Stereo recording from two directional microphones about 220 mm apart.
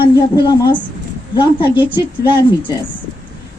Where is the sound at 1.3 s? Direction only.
20° left (ahead or behind).